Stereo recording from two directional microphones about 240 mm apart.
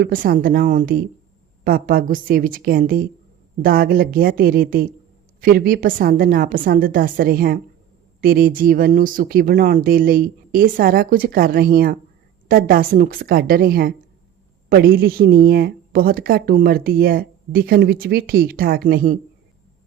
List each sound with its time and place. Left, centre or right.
0.0 s speech: right